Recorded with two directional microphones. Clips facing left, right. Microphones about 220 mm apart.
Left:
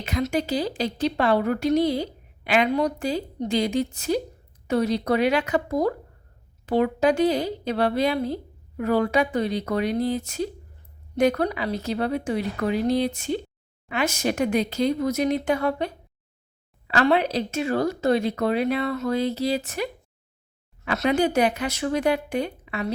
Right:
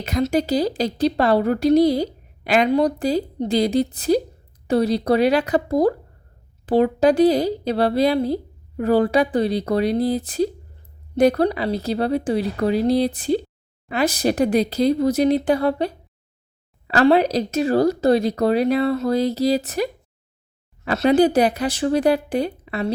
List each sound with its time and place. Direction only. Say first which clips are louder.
0.0 s speech: right 5 dB; 40° right (ahead or behind)